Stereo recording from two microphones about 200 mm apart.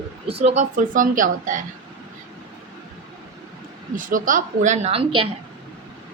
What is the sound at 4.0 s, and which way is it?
A woman's voice, 45° right (ahead or behind).